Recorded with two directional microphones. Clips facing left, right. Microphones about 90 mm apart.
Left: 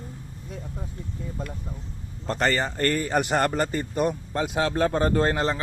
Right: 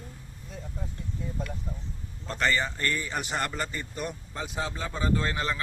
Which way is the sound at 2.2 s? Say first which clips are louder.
Left 3 dB; 40° left (ahead or behind).